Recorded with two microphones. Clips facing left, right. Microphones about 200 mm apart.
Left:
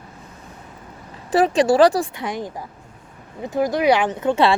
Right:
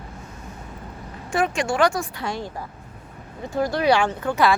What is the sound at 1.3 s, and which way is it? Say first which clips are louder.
Speech: left 7 dB; 35° left (ahead or behind).